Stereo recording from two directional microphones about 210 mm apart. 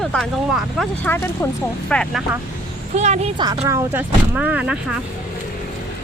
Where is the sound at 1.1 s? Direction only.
10° left (ahead or behind).